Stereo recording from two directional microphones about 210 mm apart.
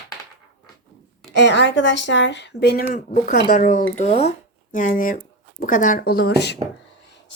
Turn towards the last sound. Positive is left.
turn(degrees=55)  # may be behind; listen again after turning